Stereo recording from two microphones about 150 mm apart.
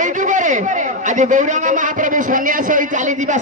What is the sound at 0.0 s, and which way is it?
A man's voice, 60° right (ahead or behind).